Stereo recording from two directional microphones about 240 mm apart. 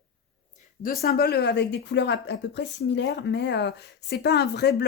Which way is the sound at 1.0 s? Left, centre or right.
Left.